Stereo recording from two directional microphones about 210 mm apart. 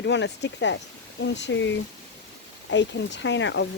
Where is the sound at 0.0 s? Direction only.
55° left (ahead or behind).